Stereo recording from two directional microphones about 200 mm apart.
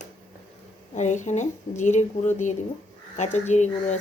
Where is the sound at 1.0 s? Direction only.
35° left (ahead or behind).